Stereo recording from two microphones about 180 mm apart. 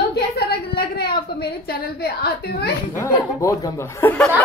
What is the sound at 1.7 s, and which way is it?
A woman's voice, 65° left (ahead or behind).